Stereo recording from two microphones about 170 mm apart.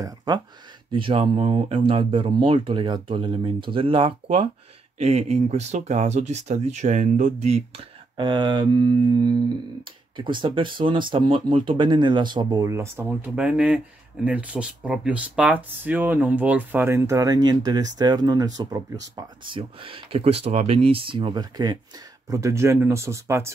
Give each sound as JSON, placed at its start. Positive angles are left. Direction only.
{"t": 0.0, "sound": "speech", "side_deg": -25}
{"t": 8.2, "sound": "speech", "side_deg": -25}
{"t": 19.1, "sound": "speech", "side_deg": -30}